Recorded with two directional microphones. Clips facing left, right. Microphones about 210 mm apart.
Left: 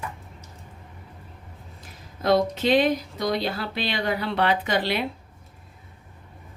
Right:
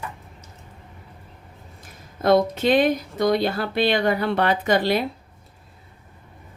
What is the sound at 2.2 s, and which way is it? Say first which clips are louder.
Speech: right 3 dB; 50° right (ahead or behind).